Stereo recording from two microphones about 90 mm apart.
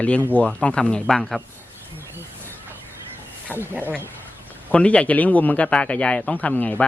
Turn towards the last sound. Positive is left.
turn(degrees=20)  # may be behind; listen again after turning